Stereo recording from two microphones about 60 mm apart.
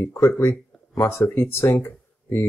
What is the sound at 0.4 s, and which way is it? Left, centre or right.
Speech, left.